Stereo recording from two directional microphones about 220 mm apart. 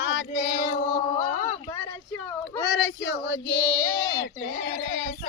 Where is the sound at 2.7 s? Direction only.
55° left (ahead or behind).